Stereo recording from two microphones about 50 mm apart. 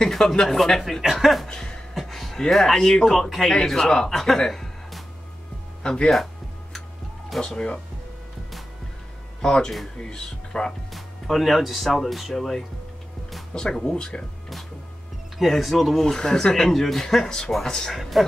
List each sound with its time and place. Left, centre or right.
0.0 s speech: centre
1.0 s speech: centre
1.5 s speech: centre
2.0 s a sound: centre
2.5 s speech: centre
7.2 s speech: centre
9.4 s speech: centre
10.9 s speech: centre
13.6 s speech: centre
15.3 s speech: centre